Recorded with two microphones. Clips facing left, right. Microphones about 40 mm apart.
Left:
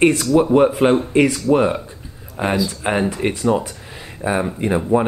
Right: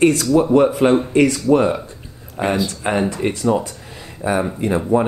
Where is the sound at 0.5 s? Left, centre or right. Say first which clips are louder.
Right 1 dB; centre.